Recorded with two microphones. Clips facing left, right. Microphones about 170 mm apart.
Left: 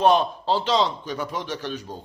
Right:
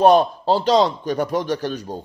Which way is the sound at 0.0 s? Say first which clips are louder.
Right 5 dB; 40° right (ahead or behind).